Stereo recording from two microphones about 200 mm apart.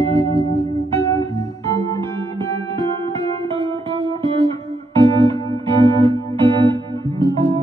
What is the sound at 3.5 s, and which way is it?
Music, 30° right (ahead or behind).